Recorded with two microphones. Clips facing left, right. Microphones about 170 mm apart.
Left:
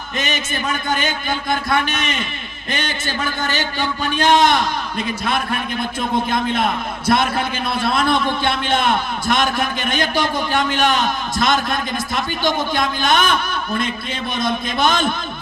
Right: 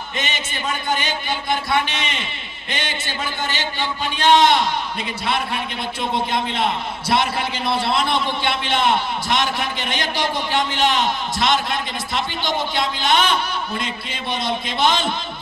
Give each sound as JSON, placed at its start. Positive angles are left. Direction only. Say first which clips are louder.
{"t": 0.3, "sound": "a man's voice", "louder": "left 5 dB", "side_deg": 45}
{"t": 1.9, "sound": "a man's voice", "louder": "left 4 dB", "side_deg": 45}
{"t": 14.8, "sound": "a man's voice", "louder": "left 1 dB", "side_deg": 50}